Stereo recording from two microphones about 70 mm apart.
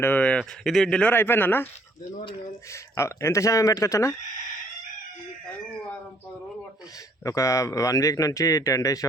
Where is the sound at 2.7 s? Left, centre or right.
Left.